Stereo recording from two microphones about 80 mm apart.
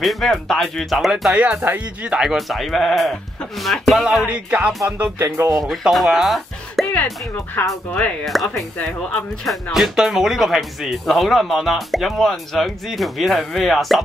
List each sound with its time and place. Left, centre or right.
0.0 s speech: centre
1.3 s music: centre
2.0 s speech: centre
4.3 s music: centre
5.2 s speech: right
5.7 s speech: centre
7.9 s speech: centre
9.8 s speech: centre